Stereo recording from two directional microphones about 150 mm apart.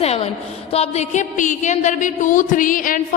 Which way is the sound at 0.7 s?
45° left (ahead or behind).